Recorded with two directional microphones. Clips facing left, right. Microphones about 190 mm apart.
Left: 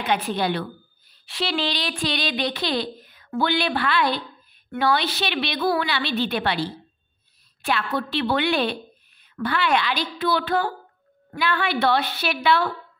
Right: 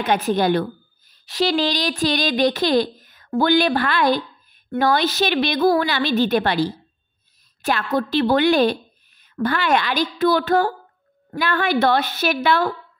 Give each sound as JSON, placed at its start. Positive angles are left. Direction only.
{"t": 0.0, "sound": "a woman's voice", "side_deg": -45}